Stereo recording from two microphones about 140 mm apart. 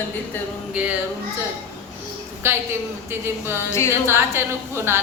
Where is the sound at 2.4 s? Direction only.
15° right (ahead or behind).